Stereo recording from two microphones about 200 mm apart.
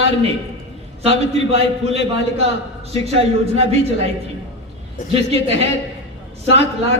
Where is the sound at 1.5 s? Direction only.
30° right (ahead or behind).